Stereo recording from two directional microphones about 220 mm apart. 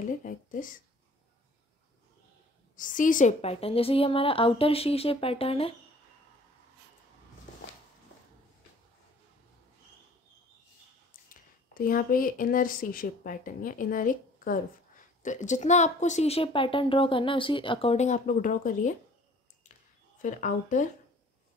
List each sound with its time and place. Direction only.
0.2 s speech: 35° left (ahead or behind)
2.7 s a woman's voice: 35° left (ahead or behind)
11.2 s a woman's voice: 40° left (ahead or behind)
20.2 s a woman's voice: 35° left (ahead or behind)